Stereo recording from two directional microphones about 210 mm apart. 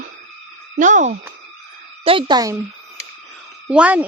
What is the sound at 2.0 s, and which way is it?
Speech, 25° right (ahead or behind).